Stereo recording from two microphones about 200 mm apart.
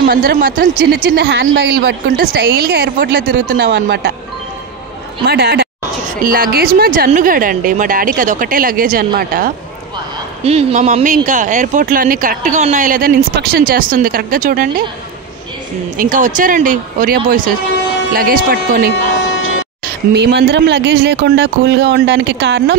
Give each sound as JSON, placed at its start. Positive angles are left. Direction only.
{"t": 0.1, "sound": "speech", "side_deg": -45}
{"t": 3.5, "sound": "speech", "side_deg": -60}
{"t": 5.2, "sound": "speech", "side_deg": -55}
{"t": 10.4, "sound": "speech", "side_deg": -30}
{"t": 16.0, "sound": "speech", "side_deg": -40}
{"t": 20.2, "sound": "speech", "side_deg": -60}